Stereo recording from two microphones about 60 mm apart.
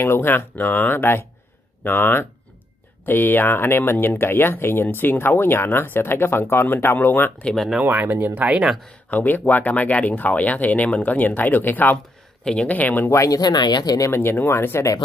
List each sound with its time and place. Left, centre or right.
0.0 s speech: left
7.5 s speech: centre
7.8 s speech: right
8.4 s speech: centre
9.1 s speech: left
13.1 s speech: left
14.1 s speech: left